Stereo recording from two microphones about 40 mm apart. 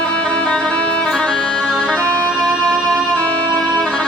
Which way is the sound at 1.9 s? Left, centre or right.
Left.